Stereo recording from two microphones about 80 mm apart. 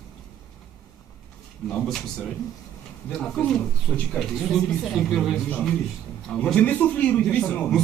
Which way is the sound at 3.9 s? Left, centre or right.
Centre.